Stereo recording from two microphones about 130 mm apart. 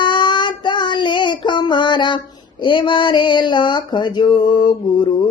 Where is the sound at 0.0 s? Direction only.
35° left (ahead or behind).